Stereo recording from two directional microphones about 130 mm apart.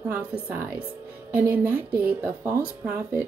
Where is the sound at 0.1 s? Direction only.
10° right (ahead or behind).